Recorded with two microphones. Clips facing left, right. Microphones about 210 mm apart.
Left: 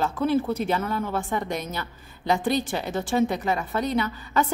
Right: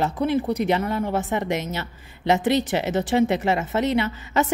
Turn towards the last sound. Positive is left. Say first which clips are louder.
# right 2 dB
turn(degrees=-25)  # may be behind; listen again after turning